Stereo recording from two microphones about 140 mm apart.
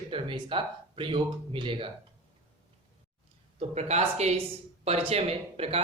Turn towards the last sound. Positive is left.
turn(degrees=-45)  # may be behind; listen again after turning